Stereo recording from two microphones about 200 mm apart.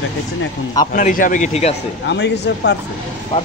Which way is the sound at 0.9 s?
40° left (ahead or behind).